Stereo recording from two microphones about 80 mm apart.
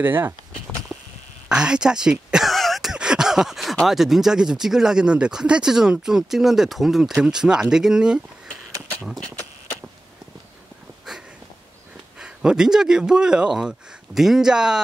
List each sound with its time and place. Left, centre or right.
0.0 s speech: right
0.9 s a sound: centre
1.5 s speech: centre
2.5 s a sound: centre
3.7 s speech: centre
12.2 s speech: centre